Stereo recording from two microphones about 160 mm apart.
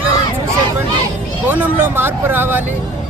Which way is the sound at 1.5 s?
10° right (ahead or behind).